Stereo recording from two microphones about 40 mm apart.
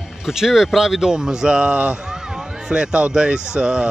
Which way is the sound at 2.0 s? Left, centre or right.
Centre.